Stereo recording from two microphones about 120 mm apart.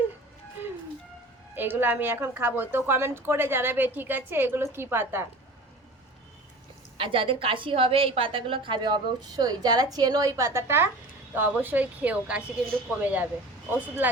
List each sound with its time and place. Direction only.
1.5 s a woman's voice: 15° right (ahead or behind)
6.9 s a woman's voice: 50° right (ahead or behind); by 14.1 s 15° right (ahead or behind)